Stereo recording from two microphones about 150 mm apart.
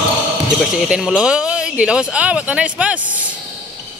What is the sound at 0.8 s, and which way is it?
Speech, 5° right (ahead or behind).